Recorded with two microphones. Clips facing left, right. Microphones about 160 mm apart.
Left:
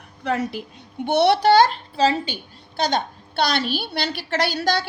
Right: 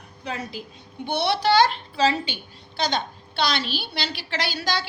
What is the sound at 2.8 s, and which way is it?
A woman's voice, 55° left (ahead or behind).